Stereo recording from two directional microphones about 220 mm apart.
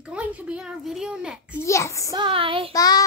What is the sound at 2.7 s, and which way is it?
Speech, 15° left (ahead or behind).